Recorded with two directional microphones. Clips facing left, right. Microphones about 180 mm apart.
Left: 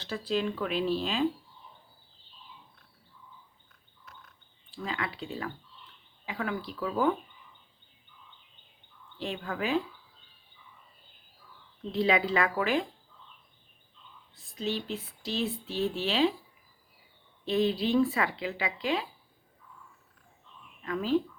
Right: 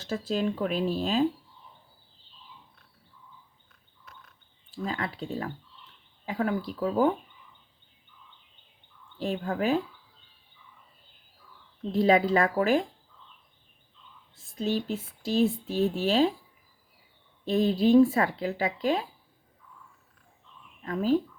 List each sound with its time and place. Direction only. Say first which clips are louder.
0.0 s speech: right 2 dB; 40° right (ahead or behind)
4.7 s speech: right 3 dB; 45° right (ahead or behind)
9.1 s speech: right 5 dB; 45° right (ahead or behind)
11.9 s speech: right 5 dB; 45° right (ahead or behind)
14.3 s speech: right 4 dB; 50° right (ahead or behind)
17.4 s speech: right 4 dB; 45° right (ahead or behind)
20.8 s speech: right 3 dB; 40° right (ahead or behind)